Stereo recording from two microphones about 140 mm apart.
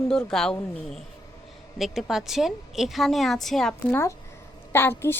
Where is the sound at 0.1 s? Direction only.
5° left (ahead or behind).